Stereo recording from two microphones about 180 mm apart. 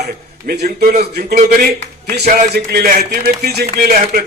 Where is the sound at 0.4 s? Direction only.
60° right (ahead or behind).